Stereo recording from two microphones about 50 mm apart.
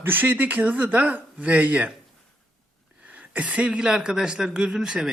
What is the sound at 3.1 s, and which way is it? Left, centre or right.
Speech, right.